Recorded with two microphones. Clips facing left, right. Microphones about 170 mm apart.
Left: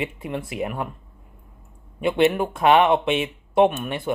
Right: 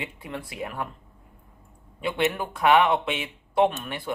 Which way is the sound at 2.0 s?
25° left (ahead or behind).